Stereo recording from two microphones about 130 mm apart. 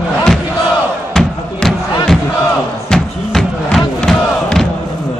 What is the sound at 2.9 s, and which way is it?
Crowd, 5° left (ahead or behind).